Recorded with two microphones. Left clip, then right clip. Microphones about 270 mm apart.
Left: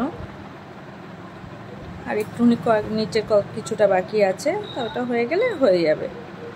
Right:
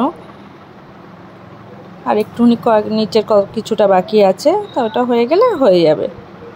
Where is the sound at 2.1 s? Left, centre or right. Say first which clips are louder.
Right 8 dB; centre.